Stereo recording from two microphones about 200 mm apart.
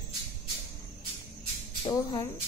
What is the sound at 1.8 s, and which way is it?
Speech, 15° left (ahead or behind).